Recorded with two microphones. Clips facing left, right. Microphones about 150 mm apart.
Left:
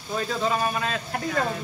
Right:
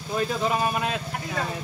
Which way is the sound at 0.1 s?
15° right (ahead or behind).